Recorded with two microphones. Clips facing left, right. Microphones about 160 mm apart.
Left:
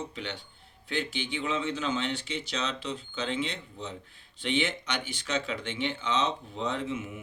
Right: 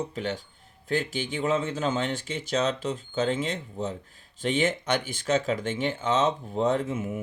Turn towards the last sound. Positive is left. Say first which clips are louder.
# right 6 dB
turn(degrees=-50)  # may be behind; listen again after turning